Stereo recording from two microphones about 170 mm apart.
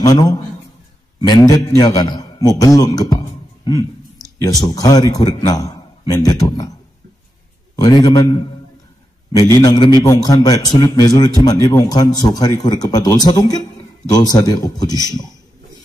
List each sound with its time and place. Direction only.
0.0 s speech: 20° left (ahead or behind)
7.7 s speech: 20° left (ahead or behind)